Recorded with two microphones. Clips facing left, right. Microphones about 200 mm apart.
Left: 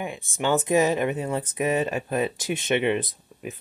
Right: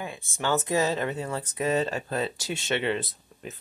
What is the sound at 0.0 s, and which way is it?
Speech, 20° left (ahead or behind).